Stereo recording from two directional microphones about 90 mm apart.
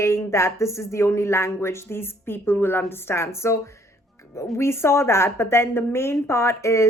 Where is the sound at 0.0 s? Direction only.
30° left (ahead or behind).